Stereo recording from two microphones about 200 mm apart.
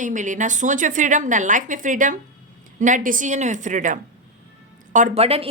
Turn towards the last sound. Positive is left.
turn(degrees=-30)  # may be behind; listen again after turning